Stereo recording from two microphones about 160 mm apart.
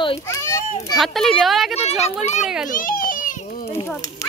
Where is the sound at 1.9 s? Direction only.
40° left (ahead or behind).